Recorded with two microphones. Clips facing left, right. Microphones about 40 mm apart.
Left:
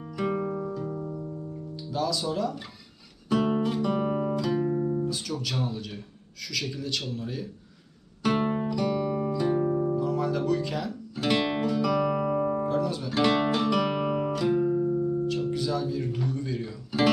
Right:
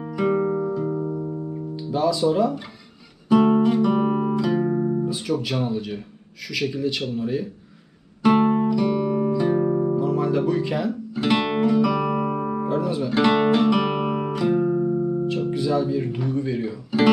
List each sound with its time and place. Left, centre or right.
0.2 s music: right
1.8 s speech: right
3.3 s guitar: right
4.6 s guitar: right
5.0 s speech: right
8.2 s music: centre
14.8 s music: right
15.2 s speech: right